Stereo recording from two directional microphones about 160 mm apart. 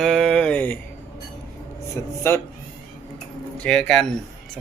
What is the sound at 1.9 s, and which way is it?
Speech, 15° left (ahead or behind).